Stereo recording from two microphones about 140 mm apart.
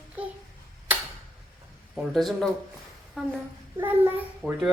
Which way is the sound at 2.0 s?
Centre (ahead or behind).